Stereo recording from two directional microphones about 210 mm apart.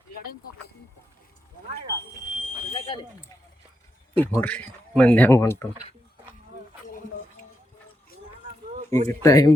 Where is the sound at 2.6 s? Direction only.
25° left (ahead or behind).